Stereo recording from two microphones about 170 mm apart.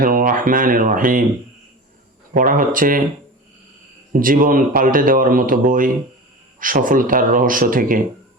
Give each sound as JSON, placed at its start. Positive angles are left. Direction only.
{"t": 0.0, "sound": "speech", "side_deg": -55}
{"t": 2.3, "sound": "speech", "side_deg": -55}
{"t": 4.1, "sound": "speech", "side_deg": -55}